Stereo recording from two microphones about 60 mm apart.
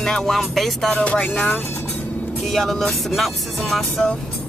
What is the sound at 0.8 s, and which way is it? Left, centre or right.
Speech, centre.